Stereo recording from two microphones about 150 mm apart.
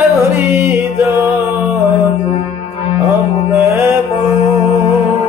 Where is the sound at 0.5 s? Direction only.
15° right (ahead or behind).